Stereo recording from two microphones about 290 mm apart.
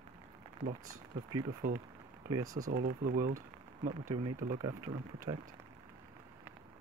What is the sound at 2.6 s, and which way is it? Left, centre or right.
Speech, right.